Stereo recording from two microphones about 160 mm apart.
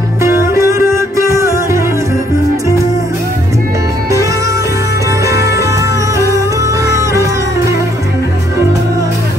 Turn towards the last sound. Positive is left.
turn(degrees=-20)  # may be behind; listen again after turning